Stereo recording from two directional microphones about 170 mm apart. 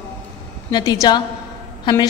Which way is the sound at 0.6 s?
25° left (ahead or behind).